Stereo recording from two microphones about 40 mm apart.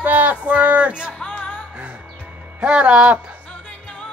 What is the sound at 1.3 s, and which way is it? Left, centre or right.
Music, left.